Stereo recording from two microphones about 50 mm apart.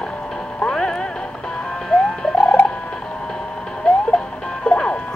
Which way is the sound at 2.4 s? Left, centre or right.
Left.